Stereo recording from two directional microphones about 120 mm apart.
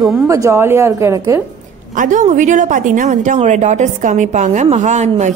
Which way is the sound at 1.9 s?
90° right.